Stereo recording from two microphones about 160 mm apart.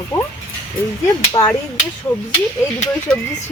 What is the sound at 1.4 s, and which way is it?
Speech, 20° left (ahead or behind).